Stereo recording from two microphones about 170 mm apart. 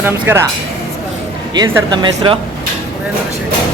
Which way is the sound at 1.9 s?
25° right (ahead or behind).